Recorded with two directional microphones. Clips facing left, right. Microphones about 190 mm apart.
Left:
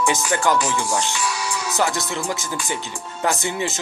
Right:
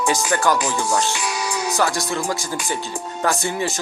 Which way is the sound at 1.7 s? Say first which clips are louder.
Even; 20° left (ahead or behind).